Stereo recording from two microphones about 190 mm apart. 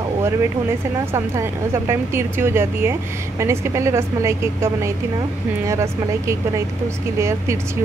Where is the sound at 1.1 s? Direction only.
15° right (ahead or behind).